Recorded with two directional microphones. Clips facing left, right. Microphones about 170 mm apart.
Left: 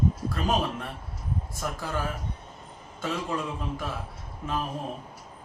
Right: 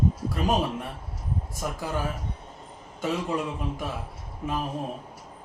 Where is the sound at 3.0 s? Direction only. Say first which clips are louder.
Right 3 dB; 15° right (ahead or behind).